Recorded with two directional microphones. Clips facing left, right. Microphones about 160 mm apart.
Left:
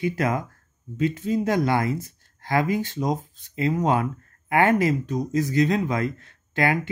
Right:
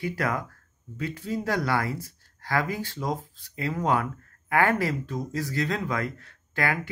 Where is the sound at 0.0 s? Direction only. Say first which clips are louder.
Left 4 dB; 20° left (ahead or behind).